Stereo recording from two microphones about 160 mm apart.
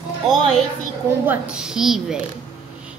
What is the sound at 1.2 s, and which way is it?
Speech, 5° right (ahead or behind).